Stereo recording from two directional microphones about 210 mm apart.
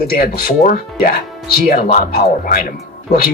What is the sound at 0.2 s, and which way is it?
Speech, 45° left (ahead or behind).